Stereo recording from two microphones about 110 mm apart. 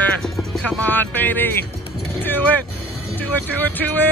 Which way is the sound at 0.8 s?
15° left (ahead or behind).